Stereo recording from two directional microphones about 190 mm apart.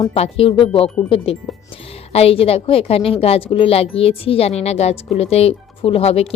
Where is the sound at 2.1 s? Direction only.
30° left (ahead or behind).